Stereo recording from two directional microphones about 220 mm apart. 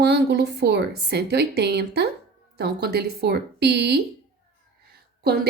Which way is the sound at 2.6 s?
45° right (ahead or behind).